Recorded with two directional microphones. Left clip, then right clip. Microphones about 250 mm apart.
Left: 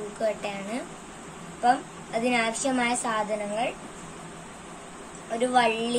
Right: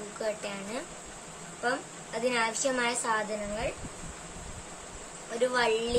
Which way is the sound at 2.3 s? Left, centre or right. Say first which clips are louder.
Left 2 dB; centre.